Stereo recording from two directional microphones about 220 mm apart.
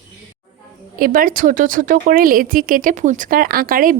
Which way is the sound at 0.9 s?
40° right (ahead or behind).